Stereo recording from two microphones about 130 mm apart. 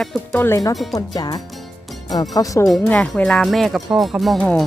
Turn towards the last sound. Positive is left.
turn(degrees=10)  # may be behind; listen again after turning